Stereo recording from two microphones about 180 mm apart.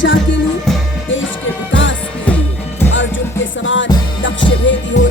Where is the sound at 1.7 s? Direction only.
90° left.